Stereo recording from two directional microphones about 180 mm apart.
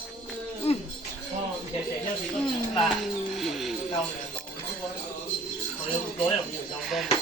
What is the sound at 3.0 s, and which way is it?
Music, centre (ahead or behind).